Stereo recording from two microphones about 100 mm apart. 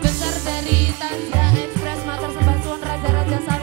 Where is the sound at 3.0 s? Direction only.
25° right (ahead or behind).